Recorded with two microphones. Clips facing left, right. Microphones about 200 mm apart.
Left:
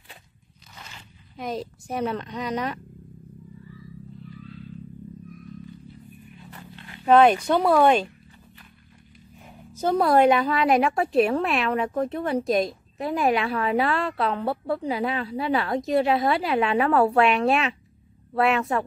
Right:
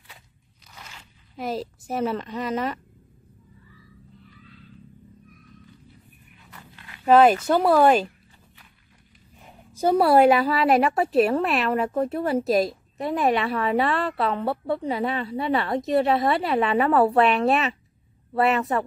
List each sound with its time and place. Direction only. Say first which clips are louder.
1.3 s a woman's voice: right 2 dB; 5° right (ahead or behind)
6.5 s a sound: left 2 dB; 30° left (ahead or behind)
7.1 s a woman's voice: right 1 dB; 5° right (ahead or behind)
9.7 s a woman's voice: right 2 dB; 10° right (ahead or behind)